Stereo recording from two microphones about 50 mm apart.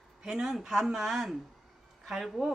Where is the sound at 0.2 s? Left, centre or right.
Centre.